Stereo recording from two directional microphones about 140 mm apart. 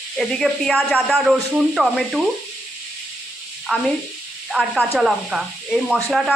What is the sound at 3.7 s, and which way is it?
Speech, 5° right (ahead or behind).